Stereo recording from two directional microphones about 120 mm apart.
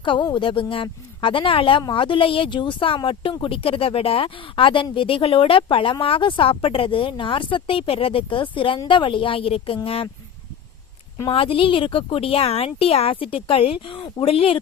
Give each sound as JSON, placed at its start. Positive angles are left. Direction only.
{"t": 0.0, "sound": "speech", "side_deg": 40}
{"t": 11.3, "sound": "speech", "side_deg": 50}